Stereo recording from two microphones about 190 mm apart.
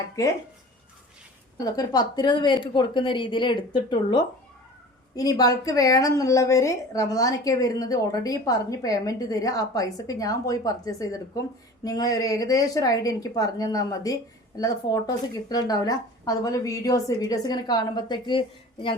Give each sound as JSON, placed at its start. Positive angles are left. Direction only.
{"t": 1.5, "sound": "a woman's voice", "side_deg": 20}